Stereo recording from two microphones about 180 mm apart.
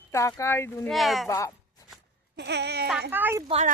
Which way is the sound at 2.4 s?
70° right (ahead or behind).